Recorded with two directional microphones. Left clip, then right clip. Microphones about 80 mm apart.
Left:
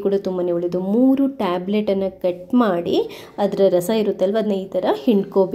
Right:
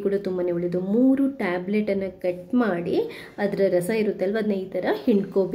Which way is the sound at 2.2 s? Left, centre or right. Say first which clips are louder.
Left 5 dB; left.